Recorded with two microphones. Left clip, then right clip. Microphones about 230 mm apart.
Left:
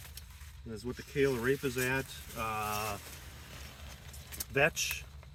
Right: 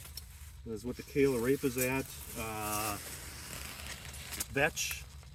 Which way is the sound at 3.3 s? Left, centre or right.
Right.